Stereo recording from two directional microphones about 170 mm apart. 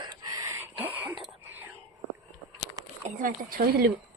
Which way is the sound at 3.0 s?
50° right (ahead or behind).